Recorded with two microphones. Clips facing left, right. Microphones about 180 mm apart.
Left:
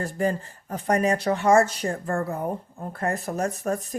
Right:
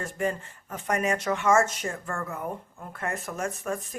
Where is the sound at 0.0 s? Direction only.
35° left (ahead or behind).